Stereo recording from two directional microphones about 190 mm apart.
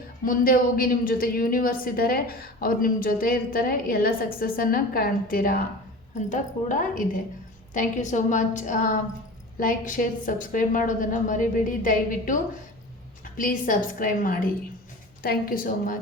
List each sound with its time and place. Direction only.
0.3 s a woman's voice: 50° left (ahead or behind)